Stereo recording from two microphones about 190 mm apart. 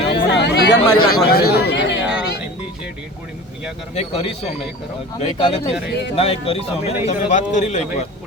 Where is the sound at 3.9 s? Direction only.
30° left (ahead or behind).